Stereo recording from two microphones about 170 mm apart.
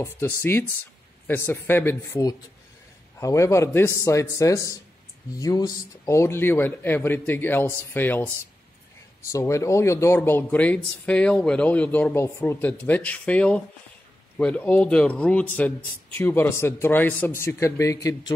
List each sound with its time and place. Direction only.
0.0 s a man's voice: 15° left (ahead or behind)
9.3 s a man's voice: 15° left (ahead or behind)